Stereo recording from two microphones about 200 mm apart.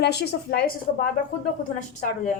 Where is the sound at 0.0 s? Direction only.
55° left (ahead or behind).